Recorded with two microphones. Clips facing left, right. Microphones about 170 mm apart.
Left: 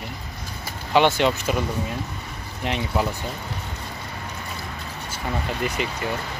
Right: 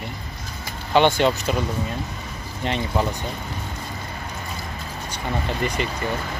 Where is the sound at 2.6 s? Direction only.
5° left (ahead or behind).